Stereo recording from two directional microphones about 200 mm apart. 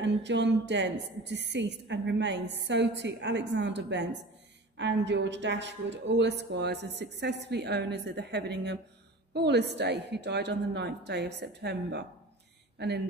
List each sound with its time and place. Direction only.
0.0 s a woman's voice: 60° right (ahead or behind)